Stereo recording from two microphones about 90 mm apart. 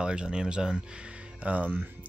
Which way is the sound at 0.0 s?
10° right (ahead or behind).